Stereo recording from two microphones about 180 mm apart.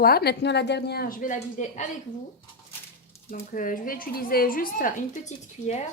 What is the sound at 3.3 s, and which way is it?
A woman's voice, 50° left (ahead or behind).